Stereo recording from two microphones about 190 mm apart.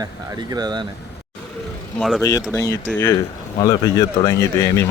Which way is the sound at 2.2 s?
15° left (ahead or behind).